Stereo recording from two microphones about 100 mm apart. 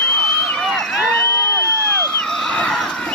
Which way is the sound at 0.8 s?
5° left (ahead or behind).